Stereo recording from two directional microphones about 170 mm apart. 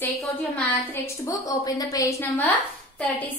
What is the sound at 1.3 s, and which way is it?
A woman's voice, 20° left (ahead or behind).